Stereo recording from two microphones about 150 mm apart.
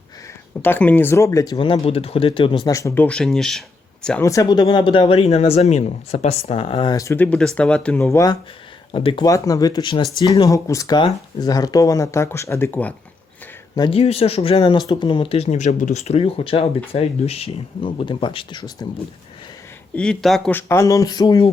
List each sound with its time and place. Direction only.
0.6 s speech: 10° left (ahead or behind)
1.5 s speech: 35° left (ahead or behind)
2.6 s speech: 20° left (ahead or behind); by 3.6 s 5° left (ahead or behind)
4.2 s speech: 20° left (ahead or behind); by 6.9 s 40° left (ahead or behind)
6.9 s speech: 20° left (ahead or behind)
8.1 s speech: 25° left (ahead or behind)
8.9 s speech: 35° left (ahead or behind)
9.2 s speech: 25° left (ahead or behind)
13.9 s speech: 40° left (ahead or behind)
15.4 s speech: 50° left (ahead or behind); by 18.9 s 30° left (ahead or behind)
20.0 s speech: 5° left (ahead or behind)
20.5 s speech: 15° left (ahead or behind)